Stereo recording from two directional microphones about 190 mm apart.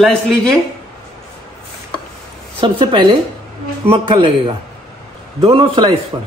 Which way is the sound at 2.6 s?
25° right (ahead or behind).